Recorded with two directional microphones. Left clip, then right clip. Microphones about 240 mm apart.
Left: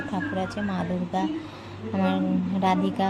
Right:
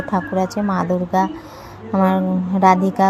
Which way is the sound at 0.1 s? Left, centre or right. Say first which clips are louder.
Right 11 dB; right.